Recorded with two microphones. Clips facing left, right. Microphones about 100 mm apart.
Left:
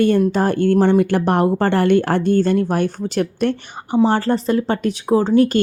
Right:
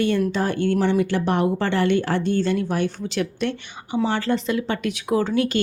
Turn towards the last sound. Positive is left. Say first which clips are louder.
# left 6 dB
turn(degrees=40)  # may be behind; listen again after turning